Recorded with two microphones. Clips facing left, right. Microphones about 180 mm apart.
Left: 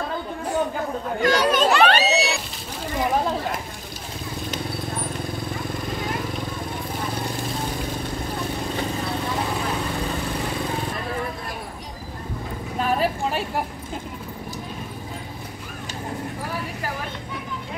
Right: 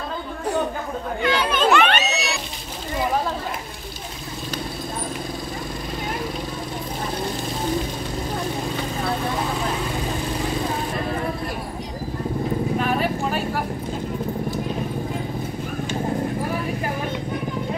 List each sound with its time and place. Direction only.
1.2 s children playing: 45° left (ahead or behind)